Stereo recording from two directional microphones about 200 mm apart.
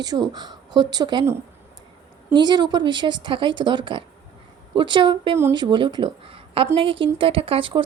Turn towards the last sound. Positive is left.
turn(degrees=-25)  # may be behind; listen again after turning